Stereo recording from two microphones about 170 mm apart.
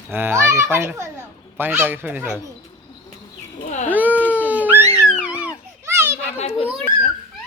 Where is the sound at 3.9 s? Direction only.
10° right (ahead or behind).